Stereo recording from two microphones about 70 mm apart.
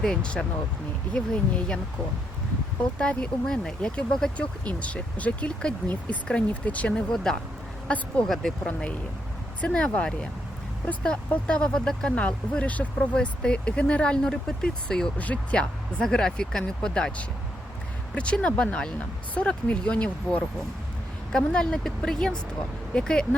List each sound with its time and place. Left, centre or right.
0.0 s speech: centre
3.0 s speech: centre
8.3 s speech: centre
9.6 s speech: centre